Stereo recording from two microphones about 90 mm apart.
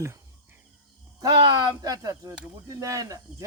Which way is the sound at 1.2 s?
50° right (ahead or behind).